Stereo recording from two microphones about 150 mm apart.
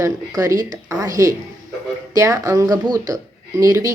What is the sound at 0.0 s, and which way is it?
Speech, 20° right (ahead or behind).